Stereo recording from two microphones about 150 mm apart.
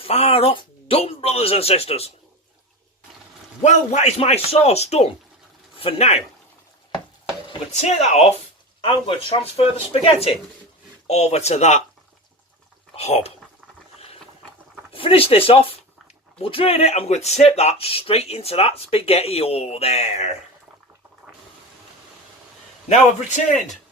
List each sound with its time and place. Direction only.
0.0 s speech: 40° left (ahead or behind)
3.6 s speech: 50° left (ahead or behind)
7.7 s speech: 50° left (ahead or behind)
13.0 s speech: 45° left (ahead or behind)
14.9 s speech: 35° left (ahead or behind)
22.9 s speech: 55° left (ahead or behind)